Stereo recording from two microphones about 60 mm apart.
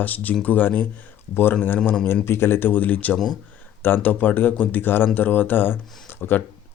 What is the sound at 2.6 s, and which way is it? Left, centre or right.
Speech, left.